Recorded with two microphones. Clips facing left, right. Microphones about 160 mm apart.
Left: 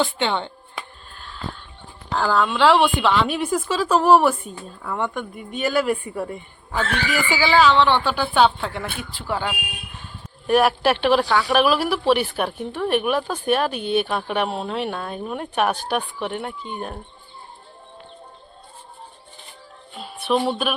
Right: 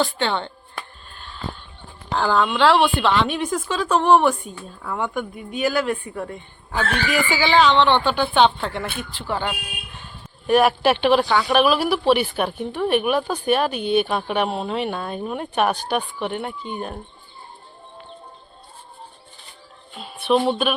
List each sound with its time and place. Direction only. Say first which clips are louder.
0.0 s speech: even; 15° left (ahead or behind)
1.1 s a sound: even; centre (ahead or behind)
2.1 s speech: right 1 dB; centre (ahead or behind)
20.5 s speech: right 3 dB; centre (ahead or behind)